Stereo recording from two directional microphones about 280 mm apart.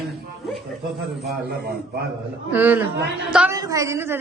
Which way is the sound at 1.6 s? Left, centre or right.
Right.